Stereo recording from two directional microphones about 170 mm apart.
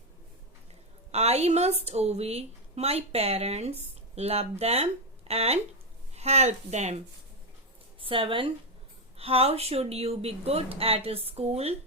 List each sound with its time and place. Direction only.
1.1 s a woman's voice: 40° right (ahead or behind)
8.0 s a woman's voice: 30° right (ahead or behind)